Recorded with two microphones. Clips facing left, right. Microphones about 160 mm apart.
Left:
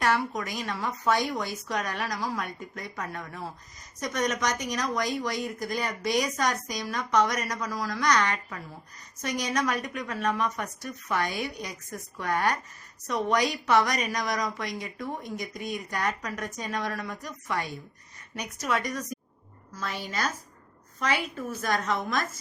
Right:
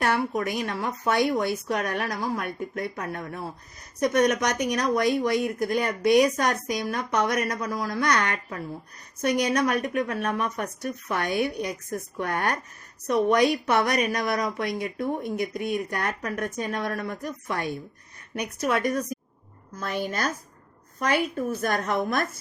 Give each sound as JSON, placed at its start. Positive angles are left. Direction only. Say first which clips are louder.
{"t": 0.0, "sound": "a woman's voice", "louder": "right 2 dB", "side_deg": -55}